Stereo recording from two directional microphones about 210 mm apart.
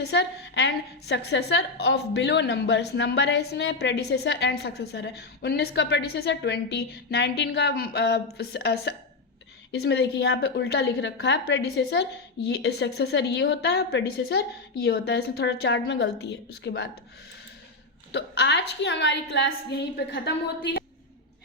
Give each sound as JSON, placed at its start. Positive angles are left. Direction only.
{"t": 0.0, "sound": "a woman's voice", "side_deg": 55}
{"t": 18.1, "sound": "a woman's voice", "side_deg": 55}